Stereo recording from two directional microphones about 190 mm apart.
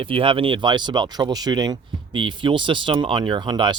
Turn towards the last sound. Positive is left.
turn(degrees=-25)  # may be behind; listen again after turning